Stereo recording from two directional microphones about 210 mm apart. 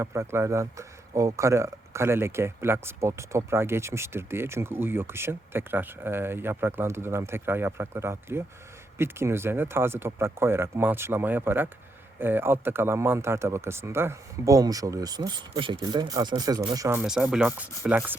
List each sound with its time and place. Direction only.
0.0 s a man's voice: 10° right (ahead or behind)